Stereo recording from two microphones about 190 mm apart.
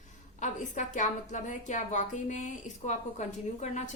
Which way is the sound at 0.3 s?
40° left (ahead or behind).